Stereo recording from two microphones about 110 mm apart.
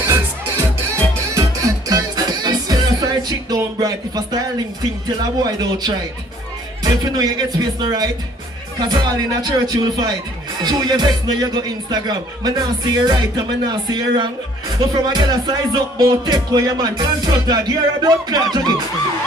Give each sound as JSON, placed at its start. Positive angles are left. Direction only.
{"t": 0.0, "sound": "music", "side_deg": -25}